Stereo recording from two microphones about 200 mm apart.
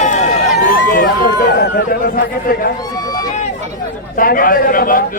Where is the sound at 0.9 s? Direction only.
45° left (ahead or behind).